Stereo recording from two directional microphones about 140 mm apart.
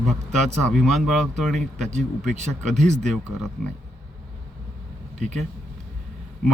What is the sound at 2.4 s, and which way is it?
Speech, 55° right (ahead or behind).